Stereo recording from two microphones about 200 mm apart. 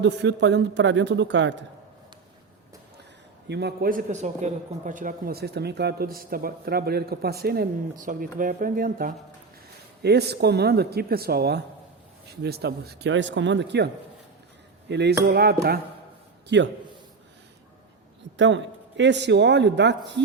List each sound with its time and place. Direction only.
0.0 s speech: 60° right (ahead or behind)
3.5 s speech: 55° right (ahead or behind)
10.0 s speech: 55° right (ahead or behind)
18.3 s speech: 65° right (ahead or behind)